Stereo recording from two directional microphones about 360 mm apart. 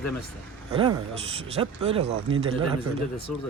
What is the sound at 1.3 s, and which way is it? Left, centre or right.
Speech, centre.